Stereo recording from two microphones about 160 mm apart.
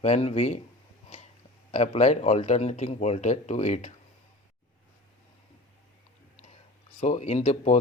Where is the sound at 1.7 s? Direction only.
45° left (ahead or behind).